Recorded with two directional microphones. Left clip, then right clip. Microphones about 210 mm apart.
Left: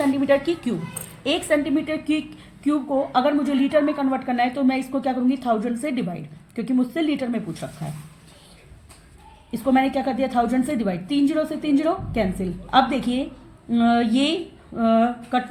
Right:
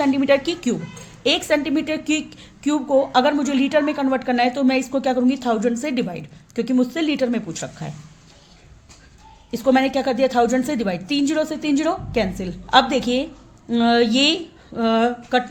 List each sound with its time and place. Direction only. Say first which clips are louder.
0.0 s a woman's voice: right 2 dB; 40° right (ahead or behind)
9.5 s a woman's voice: right 3 dB; 40° right (ahead or behind)